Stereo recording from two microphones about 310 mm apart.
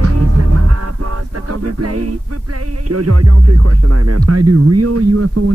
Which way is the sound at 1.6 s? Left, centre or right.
Right.